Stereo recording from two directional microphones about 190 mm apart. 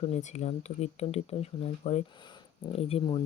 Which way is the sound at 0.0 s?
35° left (ahead or behind).